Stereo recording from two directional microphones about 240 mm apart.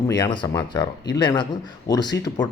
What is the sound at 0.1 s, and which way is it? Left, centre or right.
Speech, centre.